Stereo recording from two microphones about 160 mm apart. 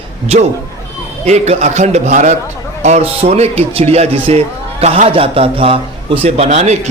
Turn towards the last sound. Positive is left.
turn(degrees=-45)  # may be behind; listen again after turning